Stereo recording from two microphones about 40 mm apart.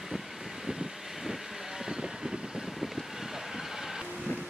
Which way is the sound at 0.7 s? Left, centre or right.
Centre.